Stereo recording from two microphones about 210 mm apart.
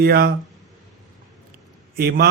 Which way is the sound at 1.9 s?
45° right (ahead or behind).